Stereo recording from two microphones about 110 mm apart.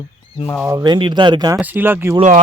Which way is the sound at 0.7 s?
40° right (ahead or behind).